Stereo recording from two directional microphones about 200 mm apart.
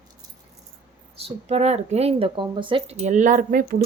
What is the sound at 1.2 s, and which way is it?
Speech, 30° right (ahead or behind).